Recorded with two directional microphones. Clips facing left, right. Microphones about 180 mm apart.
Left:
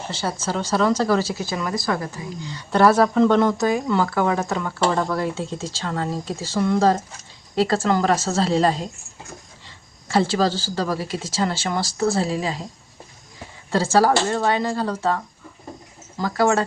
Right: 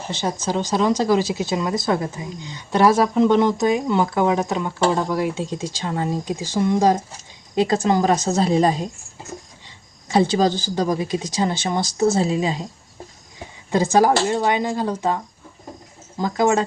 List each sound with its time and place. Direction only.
0.2 s speech: 15° right (ahead or behind)
13.7 s speech: 15° right (ahead or behind)